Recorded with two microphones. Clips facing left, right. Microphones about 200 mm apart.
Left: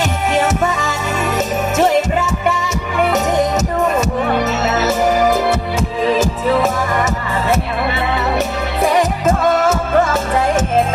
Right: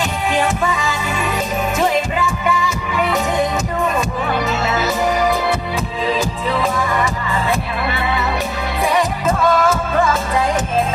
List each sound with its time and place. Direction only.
0.3 s music: 45° left (ahead or behind)
4.7 s music: 45° left (ahead or behind)
8.8 s music: 45° left (ahead or behind)